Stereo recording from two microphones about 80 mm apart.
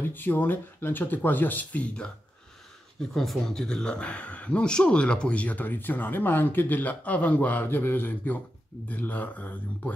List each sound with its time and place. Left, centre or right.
0.1 s speech: left
3.1 s speech: centre